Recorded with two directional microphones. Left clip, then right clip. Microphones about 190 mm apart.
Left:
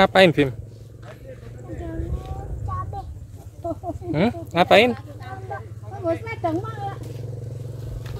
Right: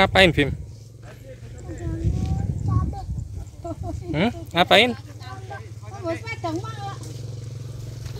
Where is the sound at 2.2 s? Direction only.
40° left (ahead or behind).